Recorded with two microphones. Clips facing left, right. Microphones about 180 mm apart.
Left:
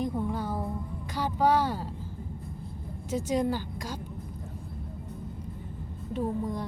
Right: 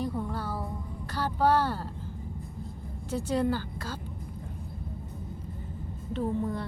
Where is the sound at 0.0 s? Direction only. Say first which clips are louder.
Left 2 dB; 15° left (ahead or behind).